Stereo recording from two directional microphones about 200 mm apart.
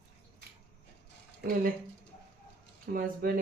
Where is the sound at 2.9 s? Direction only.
45° right (ahead or behind).